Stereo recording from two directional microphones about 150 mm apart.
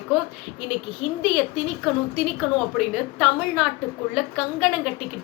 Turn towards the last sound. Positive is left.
turn(degrees=0)  # may be behind; listen again after turning